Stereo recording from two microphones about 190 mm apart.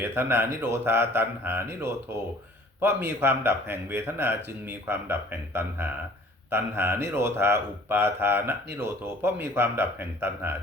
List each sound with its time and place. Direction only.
0.0 s speech: 10° right (ahead or behind)